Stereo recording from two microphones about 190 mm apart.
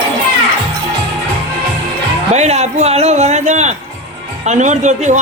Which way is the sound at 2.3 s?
35° right (ahead or behind).